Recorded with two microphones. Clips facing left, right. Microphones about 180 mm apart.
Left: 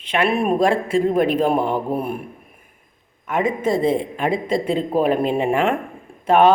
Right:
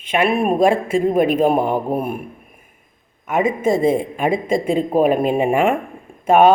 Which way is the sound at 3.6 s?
45° right (ahead or behind).